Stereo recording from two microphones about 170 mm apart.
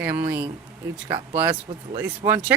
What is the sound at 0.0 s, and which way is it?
Speech, 10° right (ahead or behind).